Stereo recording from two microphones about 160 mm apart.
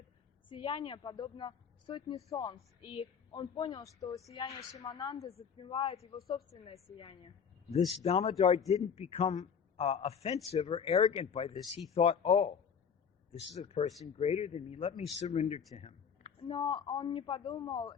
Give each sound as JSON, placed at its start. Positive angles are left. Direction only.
{"t": 0.4, "sound": "a man's voice", "side_deg": 30}
{"t": 5.1, "sound": "a man's voice", "side_deg": 40}
{"t": 6.1, "sound": "a woman's voice", "side_deg": 20}
{"t": 6.9, "sound": "a man's voice", "side_deg": 35}